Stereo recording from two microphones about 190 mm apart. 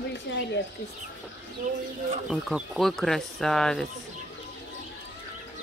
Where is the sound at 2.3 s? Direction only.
Centre (ahead or behind).